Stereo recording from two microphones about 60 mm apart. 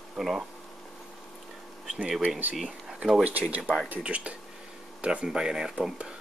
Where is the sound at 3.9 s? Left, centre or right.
Right.